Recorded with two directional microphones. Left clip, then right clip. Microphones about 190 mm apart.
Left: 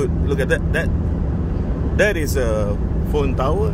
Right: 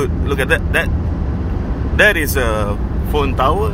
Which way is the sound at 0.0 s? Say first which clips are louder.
Right 3 dB; 20° left (ahead or behind).